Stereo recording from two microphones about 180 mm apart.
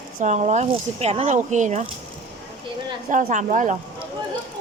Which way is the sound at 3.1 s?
45° right (ahead or behind).